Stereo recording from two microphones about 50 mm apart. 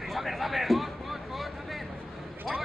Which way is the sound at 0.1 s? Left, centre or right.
Centre.